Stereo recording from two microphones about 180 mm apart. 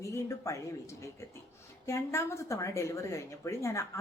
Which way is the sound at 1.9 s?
15° left (ahead or behind).